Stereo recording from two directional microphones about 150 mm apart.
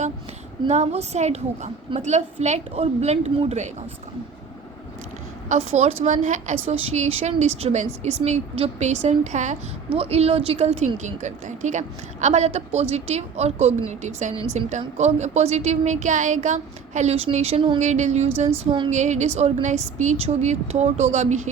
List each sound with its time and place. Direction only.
0.7 s a woman's voice: 45° right (ahead or behind)
5.5 s a woman's voice: 50° right (ahead or behind)
17.7 s a woman's voice: 50° right (ahead or behind)